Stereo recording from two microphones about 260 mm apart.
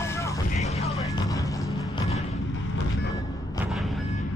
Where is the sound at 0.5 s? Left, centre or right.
Left.